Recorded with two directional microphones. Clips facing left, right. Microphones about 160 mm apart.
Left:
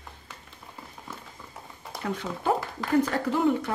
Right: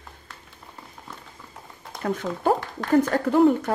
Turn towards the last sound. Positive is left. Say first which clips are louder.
# right 6 dB
turn(degrees=-40)  # may be behind; listen again after turning